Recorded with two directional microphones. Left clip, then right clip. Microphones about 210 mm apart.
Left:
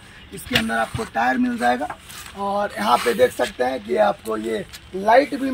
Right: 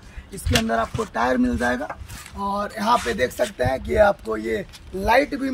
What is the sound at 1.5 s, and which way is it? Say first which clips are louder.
Speech: left 3 dB; 15° right (ahead or behind).